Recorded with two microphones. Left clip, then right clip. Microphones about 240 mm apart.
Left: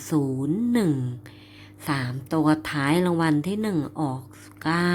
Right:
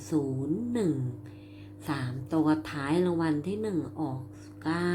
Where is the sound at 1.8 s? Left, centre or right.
Left.